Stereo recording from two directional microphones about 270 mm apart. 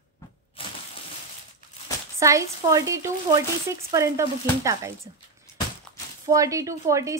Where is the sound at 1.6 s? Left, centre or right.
Left.